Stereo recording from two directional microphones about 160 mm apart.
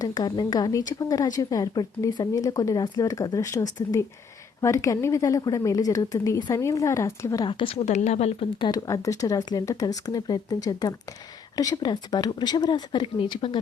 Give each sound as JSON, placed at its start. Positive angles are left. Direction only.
{"t": 0.0, "sound": "speech", "side_deg": 25}
{"t": 8.6, "sound": "speech", "side_deg": 25}